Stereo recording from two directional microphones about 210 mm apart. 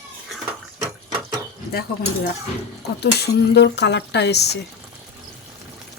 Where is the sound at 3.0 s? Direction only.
50° left (ahead or behind).